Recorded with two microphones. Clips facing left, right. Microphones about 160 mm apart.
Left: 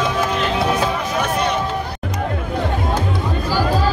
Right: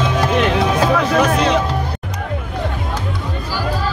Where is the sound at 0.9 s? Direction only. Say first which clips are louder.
Right 6 dB; 90° right.